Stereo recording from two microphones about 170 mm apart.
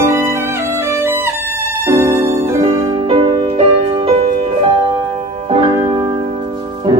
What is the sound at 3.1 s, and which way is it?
Music, 30° right (ahead or behind).